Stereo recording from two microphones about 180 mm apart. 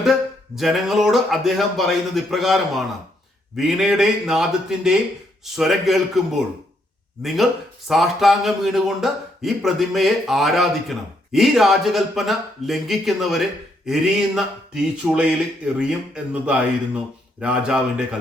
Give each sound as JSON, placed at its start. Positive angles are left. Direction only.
{"t": 0.0, "sound": "a man's voice", "side_deg": 0}
{"t": 7.9, "sound": "a man's voice", "side_deg": 0}